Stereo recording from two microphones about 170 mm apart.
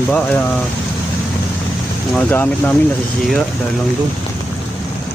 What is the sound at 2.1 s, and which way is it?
Speech, 10° left (ahead or behind).